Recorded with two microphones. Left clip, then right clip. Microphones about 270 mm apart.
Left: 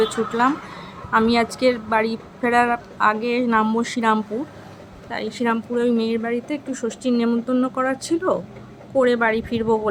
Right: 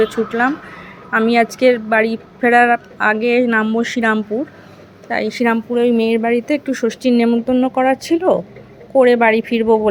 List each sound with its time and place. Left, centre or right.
0.0 s speech: centre